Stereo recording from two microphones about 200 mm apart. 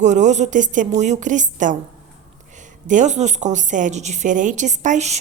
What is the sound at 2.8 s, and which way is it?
A woman's voice, 35° right (ahead or behind).